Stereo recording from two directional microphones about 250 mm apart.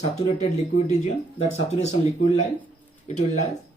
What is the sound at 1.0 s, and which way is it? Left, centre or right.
Speech, left.